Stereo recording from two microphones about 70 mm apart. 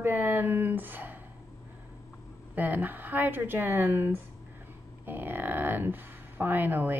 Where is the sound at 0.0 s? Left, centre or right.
Right.